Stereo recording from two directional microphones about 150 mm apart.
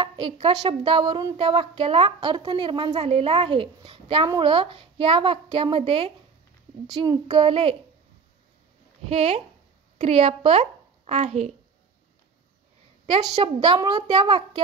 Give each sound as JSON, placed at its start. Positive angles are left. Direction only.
{"t": 0.0, "sound": "a woman's voice", "side_deg": -30}
{"t": 9.1, "sound": "a woman's voice", "side_deg": -40}
{"t": 13.0, "sound": "a woman's voice", "side_deg": -30}
{"t": 13.7, "sound": "a woman's voice", "side_deg": -20}